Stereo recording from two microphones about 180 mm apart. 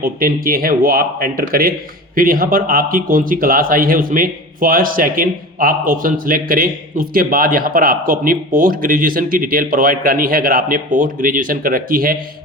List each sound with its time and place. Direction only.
0.0 s speech: 55° right (ahead or behind)